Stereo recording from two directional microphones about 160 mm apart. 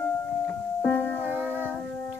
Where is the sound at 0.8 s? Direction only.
10° left (ahead or behind).